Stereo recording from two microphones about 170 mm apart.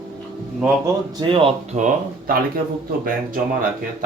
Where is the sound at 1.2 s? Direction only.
30° right (ahead or behind).